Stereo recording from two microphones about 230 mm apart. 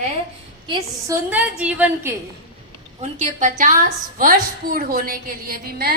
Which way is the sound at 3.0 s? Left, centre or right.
Right.